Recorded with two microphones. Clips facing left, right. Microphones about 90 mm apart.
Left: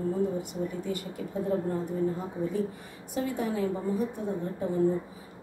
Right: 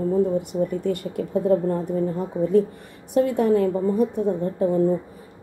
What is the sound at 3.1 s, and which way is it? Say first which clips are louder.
Speech: right 12 dB; 60° right (ahead or behind).